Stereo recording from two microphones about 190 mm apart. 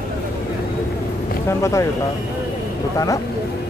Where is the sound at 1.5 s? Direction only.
15° left (ahead or behind).